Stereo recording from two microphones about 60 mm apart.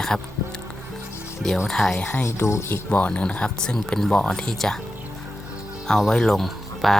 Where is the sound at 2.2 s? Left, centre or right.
Left.